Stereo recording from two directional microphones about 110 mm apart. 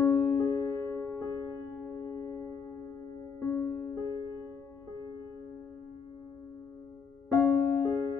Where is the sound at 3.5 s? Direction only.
20° left (ahead or behind).